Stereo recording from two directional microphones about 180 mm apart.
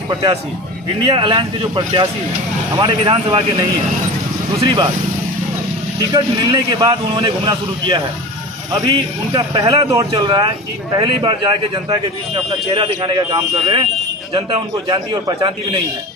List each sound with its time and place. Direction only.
0.1 s speech: 25° right (ahead or behind)
4.6 s speech: 25° right (ahead or behind)
6.0 s speech: 20° right (ahead or behind)